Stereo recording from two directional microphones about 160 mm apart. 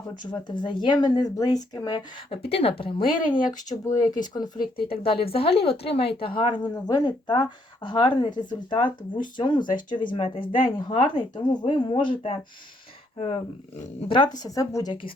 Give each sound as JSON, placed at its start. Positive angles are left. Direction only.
{"t": 0.2, "sound": "a woman's voice", "side_deg": 30}
{"t": 3.2, "sound": "speech", "side_deg": 55}
{"t": 3.7, "sound": "a woman's voice", "side_deg": 20}
{"t": 14.1, "sound": "a woman's voice", "side_deg": 25}